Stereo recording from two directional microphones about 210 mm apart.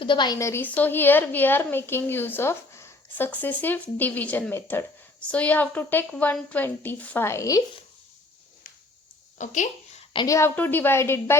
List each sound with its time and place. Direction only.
0.0 s a woman's voice: 20° left (ahead or behind)
9.4 s speech: 35° left (ahead or behind)
10.1 s a woman's voice: 20° left (ahead or behind)